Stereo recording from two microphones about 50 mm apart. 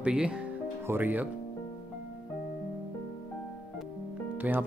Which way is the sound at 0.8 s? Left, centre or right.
Right.